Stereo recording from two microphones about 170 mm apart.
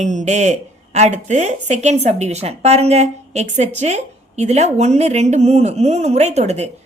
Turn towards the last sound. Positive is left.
turn(degrees=-40)  # may be behind; listen again after turning